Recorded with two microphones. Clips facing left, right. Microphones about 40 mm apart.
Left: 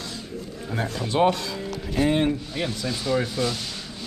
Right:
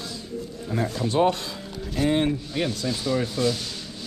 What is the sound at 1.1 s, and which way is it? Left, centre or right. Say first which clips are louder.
Speech: left 1 dB; left.